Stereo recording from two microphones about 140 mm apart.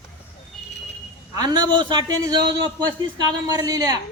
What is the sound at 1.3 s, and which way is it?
A man's voice, 30° right (ahead or behind).